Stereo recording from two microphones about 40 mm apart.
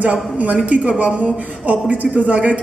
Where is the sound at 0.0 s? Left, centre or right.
Right.